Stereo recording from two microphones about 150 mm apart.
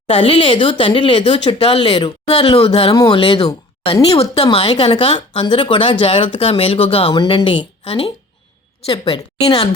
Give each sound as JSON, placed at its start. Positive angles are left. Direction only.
{"t": 0.1, "sound": "speech", "side_deg": 35}
{"t": 2.9, "sound": "speech", "side_deg": 25}
{"t": 3.2, "sound": "speech", "side_deg": 40}